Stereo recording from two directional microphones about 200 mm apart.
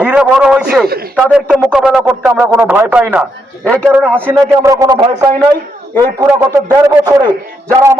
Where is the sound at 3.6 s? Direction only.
5° left (ahead or behind).